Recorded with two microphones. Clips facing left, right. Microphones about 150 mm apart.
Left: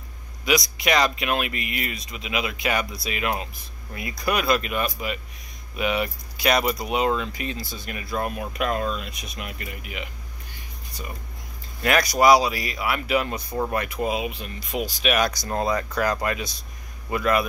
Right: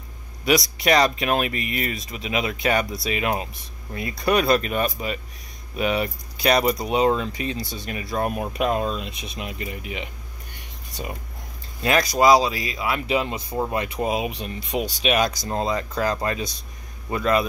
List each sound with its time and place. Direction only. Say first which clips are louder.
0.5 s speech: right 3 dB; 35° right (ahead or behind)
11.8 s speech: right 1 dB; 25° right (ahead or behind)
13.8 s speech: right 1 dB; 35° right (ahead or behind)